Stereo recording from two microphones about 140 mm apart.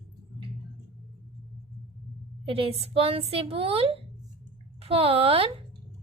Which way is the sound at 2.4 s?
45° right (ahead or behind).